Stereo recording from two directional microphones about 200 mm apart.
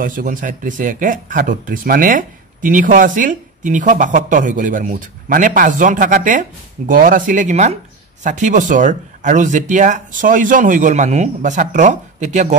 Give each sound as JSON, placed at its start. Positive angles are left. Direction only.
{"t": 0.0, "sound": "speech", "side_deg": -45}